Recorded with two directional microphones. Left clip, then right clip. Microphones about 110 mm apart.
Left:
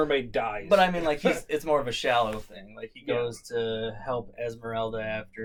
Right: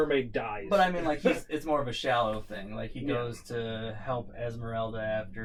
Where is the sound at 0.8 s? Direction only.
15° left (ahead or behind).